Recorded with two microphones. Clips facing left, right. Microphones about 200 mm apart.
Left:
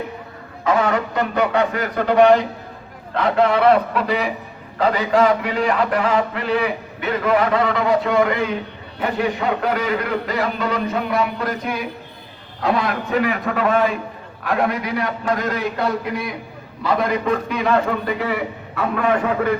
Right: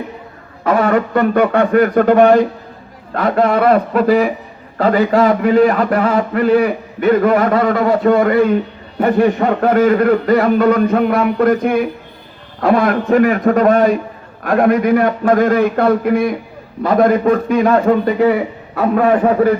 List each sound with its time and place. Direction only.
0.6 s a man's voice: 55° right (ahead or behind)